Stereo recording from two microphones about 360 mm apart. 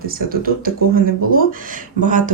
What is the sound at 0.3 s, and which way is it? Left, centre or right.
Speech, right.